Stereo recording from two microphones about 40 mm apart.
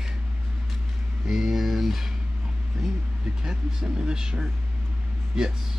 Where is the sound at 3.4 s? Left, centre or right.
Centre.